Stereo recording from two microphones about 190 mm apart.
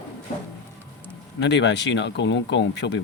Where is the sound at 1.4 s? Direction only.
70° left (ahead or behind).